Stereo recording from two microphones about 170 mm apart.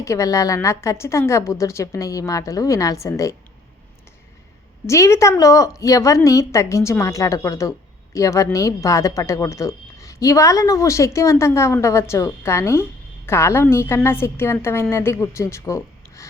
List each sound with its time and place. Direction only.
0.0 s speech: 20° left (ahead or behind)
4.9 s a woman's voice: 15° left (ahead or behind)